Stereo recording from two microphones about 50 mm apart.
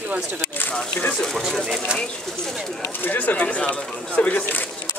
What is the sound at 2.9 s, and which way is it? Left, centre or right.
Speech, left.